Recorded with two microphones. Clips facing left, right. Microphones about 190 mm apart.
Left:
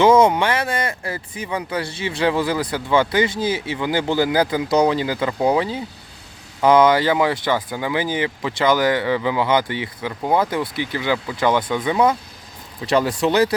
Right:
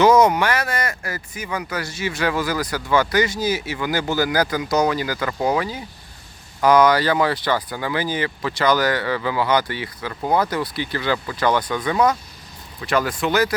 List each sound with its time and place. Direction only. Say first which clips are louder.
0.0 s speech: left 1 dB; 25° left (ahead or behind)